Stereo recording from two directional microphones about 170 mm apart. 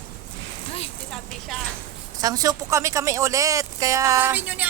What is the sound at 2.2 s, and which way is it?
Speech, 20° right (ahead or behind).